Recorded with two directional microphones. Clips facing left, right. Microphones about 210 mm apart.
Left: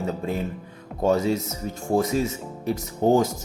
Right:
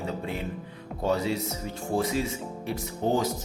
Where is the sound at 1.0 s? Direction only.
45° left (ahead or behind).